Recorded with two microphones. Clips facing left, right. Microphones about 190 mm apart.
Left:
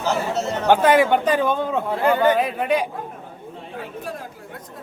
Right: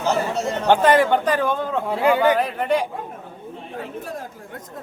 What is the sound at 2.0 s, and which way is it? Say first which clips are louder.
Speech: right 2 dB; 10° right (ahead or behind).